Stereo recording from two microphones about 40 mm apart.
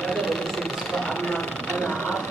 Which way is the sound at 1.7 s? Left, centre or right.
Left.